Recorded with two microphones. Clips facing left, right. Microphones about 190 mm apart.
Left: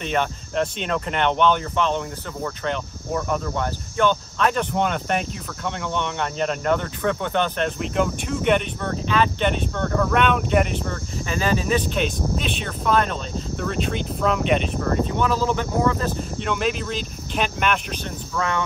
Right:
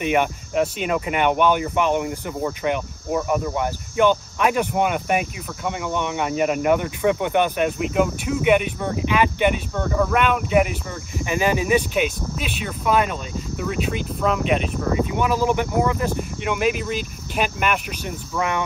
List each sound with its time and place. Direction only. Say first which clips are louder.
0.0 s speech: right 4 dB; 10° right (ahead or behind)